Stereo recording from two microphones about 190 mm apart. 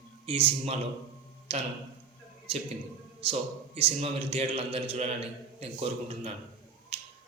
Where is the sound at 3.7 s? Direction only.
30° right (ahead or behind).